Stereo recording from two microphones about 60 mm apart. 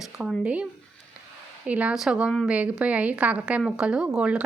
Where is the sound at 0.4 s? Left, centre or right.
Right.